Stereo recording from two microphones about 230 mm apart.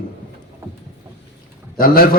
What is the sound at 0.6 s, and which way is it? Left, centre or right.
Boat, centre.